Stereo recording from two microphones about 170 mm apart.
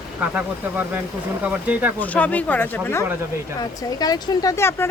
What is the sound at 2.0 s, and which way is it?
Speech, 10° left (ahead or behind).